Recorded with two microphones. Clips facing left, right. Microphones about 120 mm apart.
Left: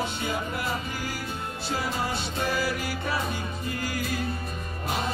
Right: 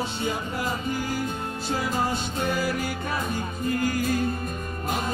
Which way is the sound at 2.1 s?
40° right (ahead or behind).